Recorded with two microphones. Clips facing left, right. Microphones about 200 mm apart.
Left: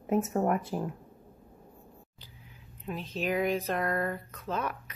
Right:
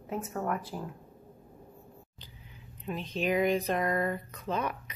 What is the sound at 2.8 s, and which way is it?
Speech, 5° left (ahead or behind).